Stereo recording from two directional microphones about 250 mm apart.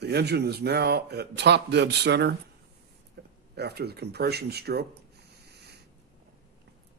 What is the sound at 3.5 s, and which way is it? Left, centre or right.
Speech, right.